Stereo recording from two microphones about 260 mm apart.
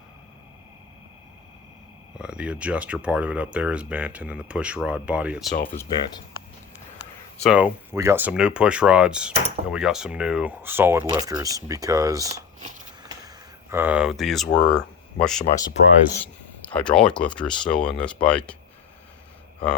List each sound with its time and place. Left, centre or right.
2.1 s speech: centre
7.4 s speech: centre
12.3 s speech: right
13.0 s a sound: centre
16.8 s speech: centre